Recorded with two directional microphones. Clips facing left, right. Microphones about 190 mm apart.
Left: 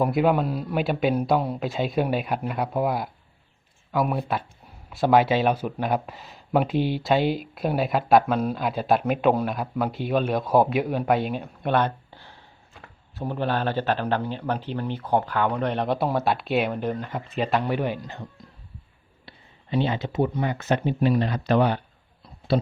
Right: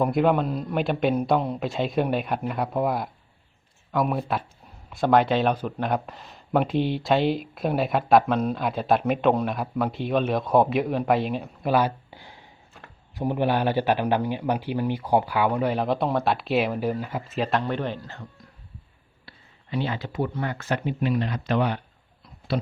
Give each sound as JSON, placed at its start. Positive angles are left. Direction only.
{"t": 0.0, "sound": "speech", "side_deg": 5}
{"t": 17.6, "sound": "speech", "side_deg": 10}
{"t": 19.7, "sound": "speech", "side_deg": 25}
{"t": 21.0, "sound": "speech", "side_deg": 35}